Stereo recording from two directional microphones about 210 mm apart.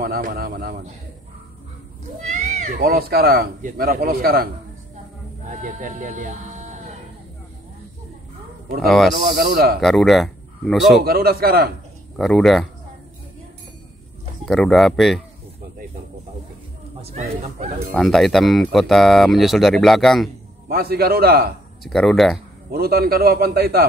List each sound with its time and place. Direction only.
0.0 s speech: 45° right (ahead or behind)
2.2 s speech: 35° right (ahead or behind)
5.5 s speech: 40° right (ahead or behind)
8.8 s speech: centre (ahead or behind)
9.1 s speech: 45° right (ahead or behind)
9.8 s speech: centre (ahead or behind)
11.1 s speech: 45° right (ahead or behind)
12.2 s speech: centre (ahead or behind)
14.4 s speech: centre (ahead or behind)
17.0 s speech: 30° right (ahead or behind)
17.9 s speech: centre (ahead or behind)
20.6 s speech: 45° right (ahead or behind)
21.8 s speech: centre (ahead or behind)
22.7 s speech: 45° right (ahead or behind)